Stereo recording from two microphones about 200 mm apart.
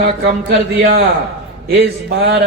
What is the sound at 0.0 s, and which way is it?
A man's voice, 55° right (ahead or behind).